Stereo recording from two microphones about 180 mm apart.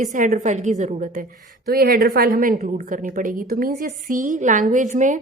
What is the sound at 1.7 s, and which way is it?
A woman's voice, 55° right (ahead or behind).